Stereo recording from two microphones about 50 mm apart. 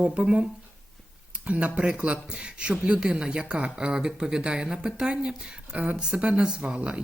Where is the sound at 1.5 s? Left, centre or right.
Right.